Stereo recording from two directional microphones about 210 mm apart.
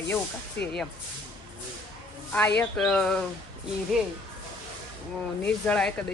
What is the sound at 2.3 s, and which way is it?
Speech, 5° left (ahead or behind).